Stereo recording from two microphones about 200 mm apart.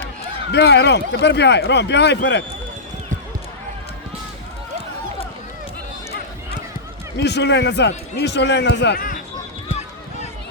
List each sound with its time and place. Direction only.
0.5 s a man's voice: 60° left (ahead or behind)
7.2 s a man's voice: 60° left (ahead or behind)